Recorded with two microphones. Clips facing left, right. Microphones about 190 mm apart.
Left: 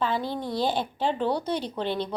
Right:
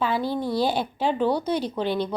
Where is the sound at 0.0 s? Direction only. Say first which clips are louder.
Right 3 dB; 10° right (ahead or behind).